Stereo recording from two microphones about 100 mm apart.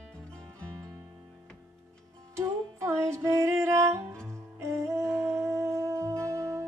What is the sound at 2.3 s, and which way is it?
Music, 30° right (ahead or behind).